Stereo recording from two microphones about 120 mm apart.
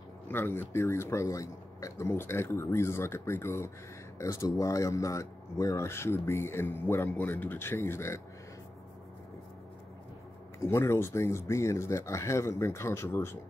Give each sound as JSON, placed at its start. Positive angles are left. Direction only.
{"t": 0.3, "sound": "speech", "side_deg": 20}
{"t": 10.6, "sound": "speech", "side_deg": 25}